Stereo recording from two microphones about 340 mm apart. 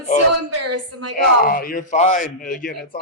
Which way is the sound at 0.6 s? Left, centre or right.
Right.